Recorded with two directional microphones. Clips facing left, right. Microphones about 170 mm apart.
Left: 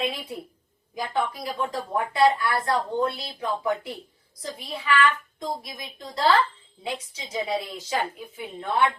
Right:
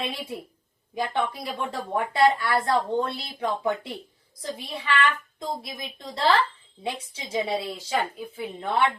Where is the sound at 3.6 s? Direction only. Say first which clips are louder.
Even; 30° right (ahead or behind).